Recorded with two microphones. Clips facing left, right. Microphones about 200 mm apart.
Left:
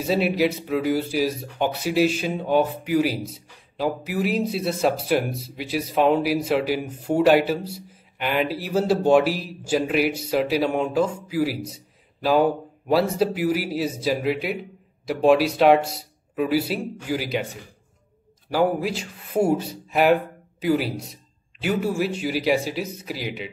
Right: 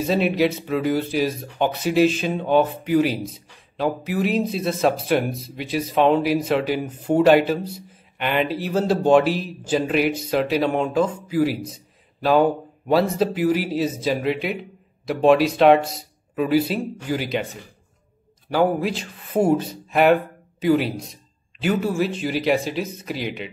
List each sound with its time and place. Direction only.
0.0 s speech: 10° left (ahead or behind)
18.5 s speech: 5° left (ahead or behind)